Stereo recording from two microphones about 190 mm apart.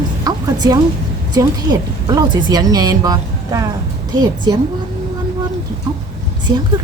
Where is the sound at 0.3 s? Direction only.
20° right (ahead or behind).